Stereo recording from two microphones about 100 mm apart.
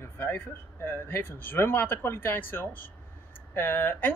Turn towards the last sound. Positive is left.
turn(degrees=20)  # may be behind; listen again after turning